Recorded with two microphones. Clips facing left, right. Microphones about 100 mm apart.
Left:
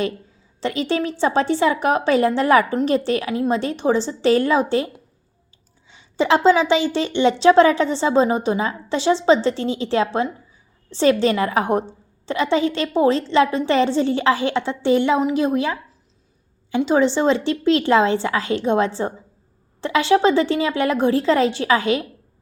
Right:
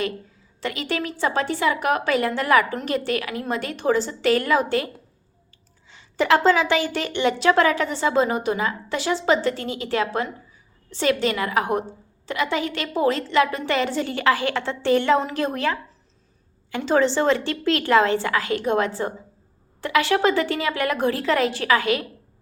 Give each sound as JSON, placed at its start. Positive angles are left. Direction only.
{"t": 0.6, "sound": "a woman's voice", "side_deg": 30}
{"t": 5.9, "sound": "a woman's voice", "side_deg": 20}